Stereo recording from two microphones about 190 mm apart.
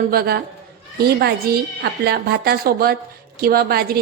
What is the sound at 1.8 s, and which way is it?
A woman's voice, 60° right (ahead or behind).